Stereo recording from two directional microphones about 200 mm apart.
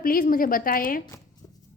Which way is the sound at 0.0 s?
45° left (ahead or behind).